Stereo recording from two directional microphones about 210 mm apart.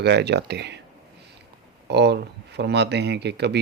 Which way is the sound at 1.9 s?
55° right (ahead or behind).